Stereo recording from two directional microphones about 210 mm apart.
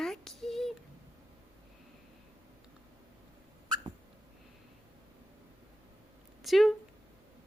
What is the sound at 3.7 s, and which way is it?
Rodents, 20° right (ahead or behind).